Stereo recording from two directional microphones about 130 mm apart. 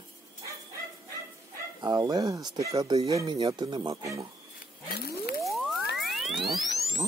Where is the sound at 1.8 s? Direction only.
25° right (ahead or behind).